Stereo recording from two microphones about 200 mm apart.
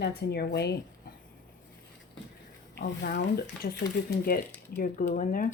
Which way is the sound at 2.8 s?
50° left (ahead or behind).